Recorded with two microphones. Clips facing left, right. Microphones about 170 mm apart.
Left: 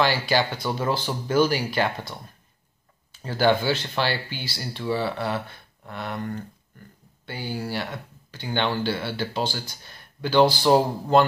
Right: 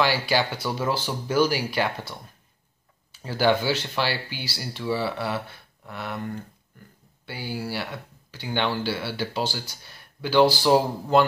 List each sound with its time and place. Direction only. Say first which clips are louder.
0.0 s speech: left 1 dB; 10° right (ahead or behind)